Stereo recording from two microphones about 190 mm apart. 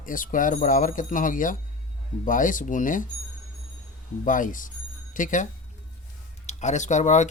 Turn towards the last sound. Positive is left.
turn(degrees=40)  # may be behind; listen again after turning